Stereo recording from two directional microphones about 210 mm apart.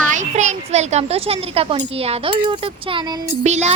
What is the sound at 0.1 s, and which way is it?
A child's voice, 35° right (ahead or behind).